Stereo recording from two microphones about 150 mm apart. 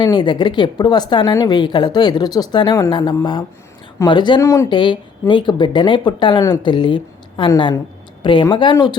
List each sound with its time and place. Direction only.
0.0 s a woman's voice: 30° left (ahead or behind)
4.4 s a woman's voice: 20° left (ahead or behind)
4.7 s a woman's voice: 35° left (ahead or behind)